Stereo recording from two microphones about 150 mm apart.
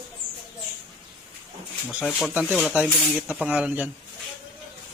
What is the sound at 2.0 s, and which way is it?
A man's voice, 5° right (ahead or behind).